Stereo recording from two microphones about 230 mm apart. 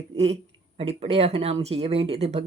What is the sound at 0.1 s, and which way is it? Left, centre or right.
A woman's voice, right.